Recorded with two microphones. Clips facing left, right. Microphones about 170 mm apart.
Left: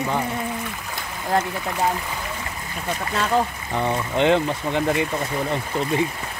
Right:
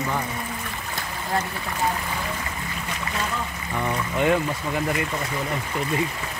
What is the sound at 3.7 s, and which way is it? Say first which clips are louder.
Speech: left 3 dB; 25° left (ahead or behind).